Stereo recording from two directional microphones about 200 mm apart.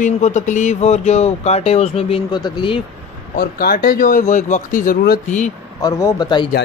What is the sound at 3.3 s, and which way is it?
Speech, 50° left (ahead or behind).